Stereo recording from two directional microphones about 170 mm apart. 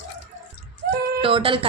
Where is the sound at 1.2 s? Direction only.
30° right (ahead or behind).